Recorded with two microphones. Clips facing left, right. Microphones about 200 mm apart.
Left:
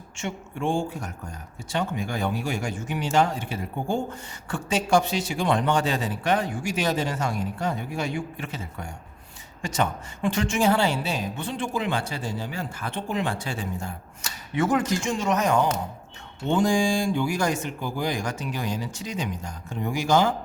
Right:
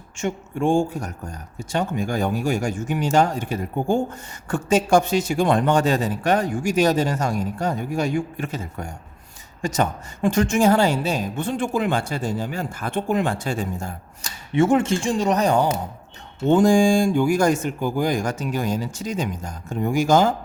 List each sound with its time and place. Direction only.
0.2 s speech: 45° right (ahead or behind)
14.5 s speech: 25° right (ahead or behind)
16.5 s speech: 45° right (ahead or behind)